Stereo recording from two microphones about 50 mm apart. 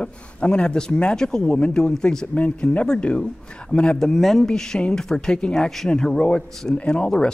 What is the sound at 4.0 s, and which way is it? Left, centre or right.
A man's voice, centre.